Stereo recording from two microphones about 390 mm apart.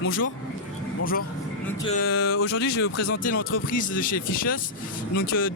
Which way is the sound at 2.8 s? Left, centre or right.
Left.